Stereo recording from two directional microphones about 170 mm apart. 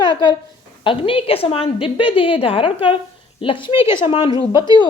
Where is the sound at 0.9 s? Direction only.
30° left (ahead or behind).